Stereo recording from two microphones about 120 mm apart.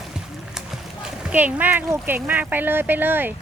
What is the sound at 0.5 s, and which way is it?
Horse, 10° right (ahead or behind).